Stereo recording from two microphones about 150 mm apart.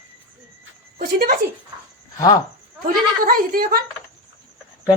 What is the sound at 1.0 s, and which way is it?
Speech, 90° right.